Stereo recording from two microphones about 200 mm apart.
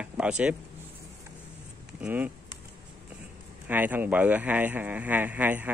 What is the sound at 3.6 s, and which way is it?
Speech, 10° right (ahead or behind).